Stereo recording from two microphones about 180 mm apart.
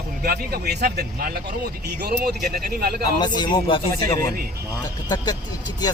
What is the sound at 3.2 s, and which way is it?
Speech, 25° left (ahead or behind).